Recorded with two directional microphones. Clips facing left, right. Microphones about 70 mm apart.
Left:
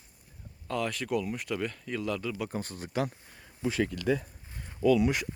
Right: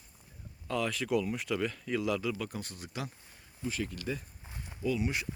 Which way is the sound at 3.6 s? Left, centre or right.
Left.